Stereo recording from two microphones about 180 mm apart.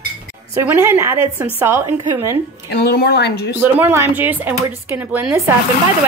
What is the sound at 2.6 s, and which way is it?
Speech, 65° left (ahead or behind).